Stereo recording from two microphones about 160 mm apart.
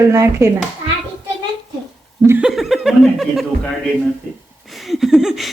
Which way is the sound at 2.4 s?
Centre (ahead or behind).